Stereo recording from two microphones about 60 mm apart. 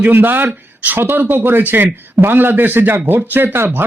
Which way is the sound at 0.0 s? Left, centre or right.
Right.